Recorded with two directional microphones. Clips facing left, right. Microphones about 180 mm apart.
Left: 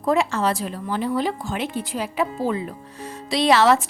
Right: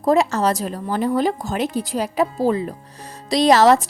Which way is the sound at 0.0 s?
40° right (ahead or behind).